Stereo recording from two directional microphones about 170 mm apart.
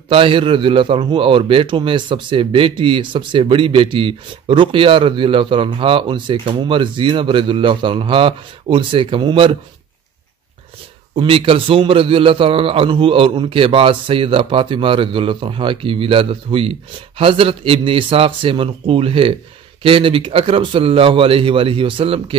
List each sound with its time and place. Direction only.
0.1 s a man's voice: 30° right (ahead or behind)
11.1 s a man's voice: 30° right (ahead or behind)